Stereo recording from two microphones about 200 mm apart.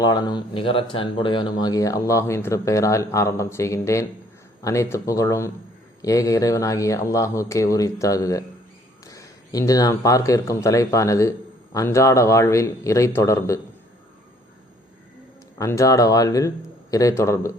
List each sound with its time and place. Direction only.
0.0 s speech: 20° left (ahead or behind)
15.5 s speech: 15° left (ahead or behind)